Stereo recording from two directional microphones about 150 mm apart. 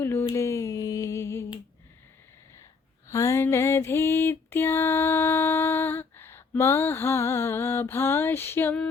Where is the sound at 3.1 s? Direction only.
20° left (ahead or behind).